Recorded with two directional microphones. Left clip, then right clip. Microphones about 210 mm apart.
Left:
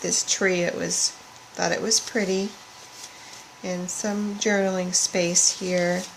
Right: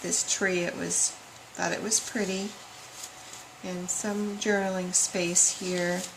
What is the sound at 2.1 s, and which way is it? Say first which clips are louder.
Speech: left 6 dB; 40° left (ahead or behind).